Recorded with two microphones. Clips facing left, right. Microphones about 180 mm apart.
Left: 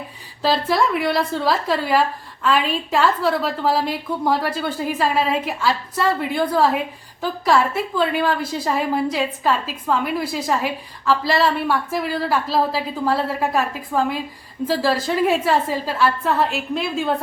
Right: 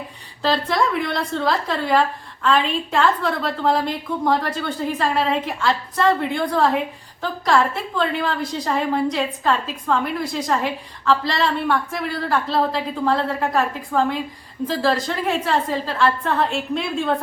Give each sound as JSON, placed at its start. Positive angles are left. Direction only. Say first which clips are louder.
{"t": 0.4, "sound": "a woman's voice", "louder": "left 1 dB", "side_deg": 5}
{"t": 7.9, "sound": "a woman's voice", "louder": "left 2 dB", "side_deg": 5}